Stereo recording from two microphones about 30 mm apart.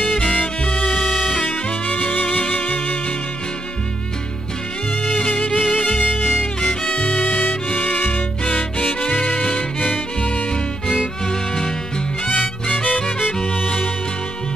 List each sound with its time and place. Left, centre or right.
0.0 s music: left
2.1 s music: left
5.0 s music: left
6.7 s music: left
7.0 s music: left
8.5 s violin: left
11.2 s music: left
12.3 s music: left
13.5 s music: left